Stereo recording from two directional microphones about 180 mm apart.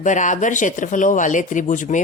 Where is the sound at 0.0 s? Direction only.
45° left (ahead or behind).